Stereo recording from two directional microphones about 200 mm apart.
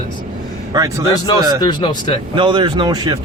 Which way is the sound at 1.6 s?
20° left (ahead or behind).